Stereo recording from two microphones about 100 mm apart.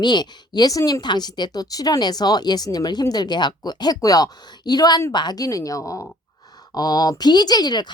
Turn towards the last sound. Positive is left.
turn(degrees=45)  # may be behind; listen again after turning